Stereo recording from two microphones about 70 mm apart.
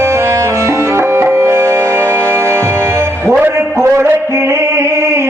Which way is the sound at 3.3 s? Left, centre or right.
Right.